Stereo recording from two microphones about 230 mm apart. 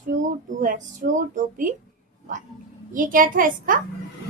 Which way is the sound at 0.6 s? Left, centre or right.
Right.